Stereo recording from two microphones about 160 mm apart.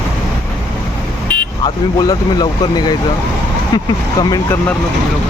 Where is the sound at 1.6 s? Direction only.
25° left (ahead or behind).